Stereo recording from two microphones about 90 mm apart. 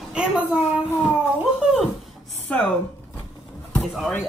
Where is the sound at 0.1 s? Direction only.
10° right (ahead or behind).